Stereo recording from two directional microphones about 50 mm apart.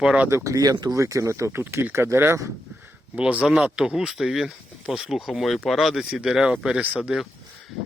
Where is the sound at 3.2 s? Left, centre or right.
Right.